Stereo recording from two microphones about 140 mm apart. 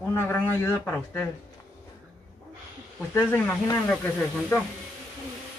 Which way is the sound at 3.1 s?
15° left (ahead or behind).